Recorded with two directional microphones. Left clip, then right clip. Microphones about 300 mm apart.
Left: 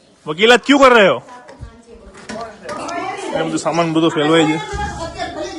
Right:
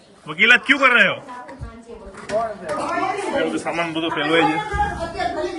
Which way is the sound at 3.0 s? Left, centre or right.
Centre.